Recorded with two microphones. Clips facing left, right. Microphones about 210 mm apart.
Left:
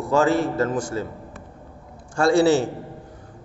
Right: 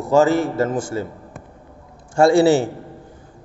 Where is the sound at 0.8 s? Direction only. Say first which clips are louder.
Right 2 dB; 25° right (ahead or behind).